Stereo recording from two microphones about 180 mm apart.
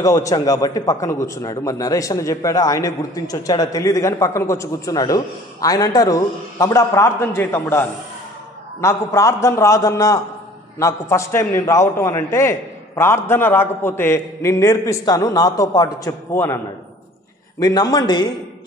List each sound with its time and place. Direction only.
0.0 s a man's voice: 20° left (ahead or behind)
8.8 s a man's voice: 15° left (ahead or behind)
17.6 s a man's voice: 20° left (ahead or behind)